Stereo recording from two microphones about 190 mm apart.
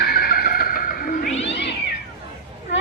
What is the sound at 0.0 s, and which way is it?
Neigh, 55° left (ahead or behind).